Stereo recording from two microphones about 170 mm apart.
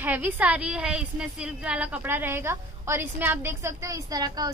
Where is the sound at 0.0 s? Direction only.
10° right (ahead or behind).